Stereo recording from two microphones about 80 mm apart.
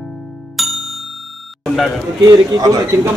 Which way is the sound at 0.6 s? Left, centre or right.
Centre.